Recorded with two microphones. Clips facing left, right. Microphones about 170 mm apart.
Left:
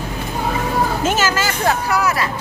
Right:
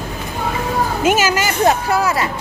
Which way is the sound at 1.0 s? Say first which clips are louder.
Right 3 dB; 15° right (ahead or behind).